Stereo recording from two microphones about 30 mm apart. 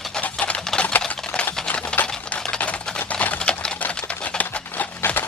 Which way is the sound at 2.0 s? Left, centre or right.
Left.